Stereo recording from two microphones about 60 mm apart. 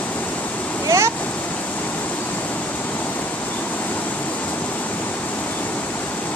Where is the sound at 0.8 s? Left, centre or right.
Right.